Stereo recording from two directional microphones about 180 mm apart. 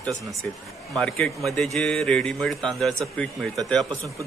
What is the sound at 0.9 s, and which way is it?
Speech, 5° left (ahead or behind).